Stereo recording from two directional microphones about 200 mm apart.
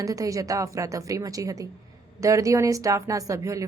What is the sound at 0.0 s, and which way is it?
Speech, 15° right (ahead or behind).